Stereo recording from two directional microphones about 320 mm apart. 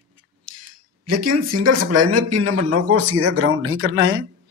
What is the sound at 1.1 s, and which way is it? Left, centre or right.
Speech, right.